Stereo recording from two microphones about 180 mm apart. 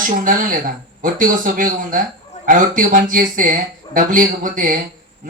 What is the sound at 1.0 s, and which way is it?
Speech, 50° right (ahead or behind).